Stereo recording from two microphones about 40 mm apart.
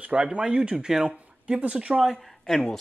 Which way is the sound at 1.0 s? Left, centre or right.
Right.